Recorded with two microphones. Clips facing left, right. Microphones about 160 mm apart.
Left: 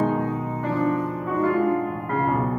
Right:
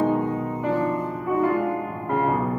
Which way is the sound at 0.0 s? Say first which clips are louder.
Right 1 dB; 10° right (ahead or behind).